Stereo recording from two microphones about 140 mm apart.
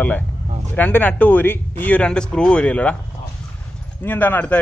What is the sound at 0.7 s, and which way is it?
Speech, 10° left (ahead or behind).